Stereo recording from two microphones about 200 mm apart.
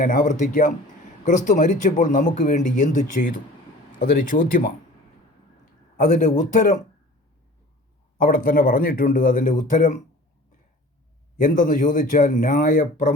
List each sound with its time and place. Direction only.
0.0 s speech: 40° left (ahead or behind)
6.0 s speech: 40° left (ahead or behind)
8.2 s speech: 45° left (ahead or behind)
11.3 s speech: 40° left (ahead or behind)